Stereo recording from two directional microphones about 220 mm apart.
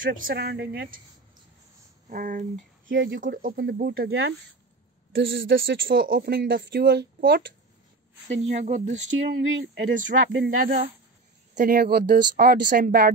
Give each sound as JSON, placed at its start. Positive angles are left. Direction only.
{"t": 0.0, "sound": "speech", "side_deg": -40}
{"t": 2.0, "sound": "speech", "side_deg": -40}
{"t": 2.9, "sound": "speech", "side_deg": -55}
{"t": 3.2, "sound": "speech", "side_deg": -40}
{"t": 8.5, "sound": "speech", "side_deg": -35}